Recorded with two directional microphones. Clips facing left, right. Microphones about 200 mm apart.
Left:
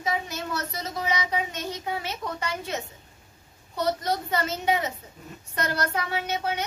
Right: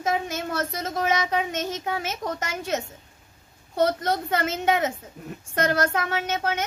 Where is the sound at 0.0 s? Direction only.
50° right (ahead or behind).